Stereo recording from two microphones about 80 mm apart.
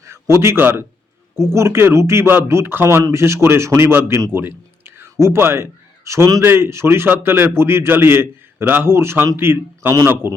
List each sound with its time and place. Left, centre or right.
0.0 s a man's voice: right
6.1 s a man's voice: right
6.4 s a man's voice: right